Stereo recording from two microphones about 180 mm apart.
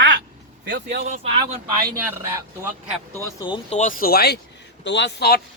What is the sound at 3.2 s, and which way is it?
Speech, 25° left (ahead or behind).